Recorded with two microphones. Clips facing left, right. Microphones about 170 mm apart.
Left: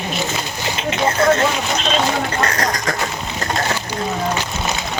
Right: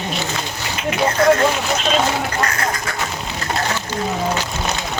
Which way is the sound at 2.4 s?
35° left (ahead or behind).